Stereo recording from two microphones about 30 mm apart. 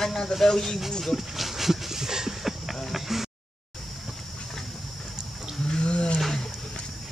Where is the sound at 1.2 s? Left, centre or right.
Centre.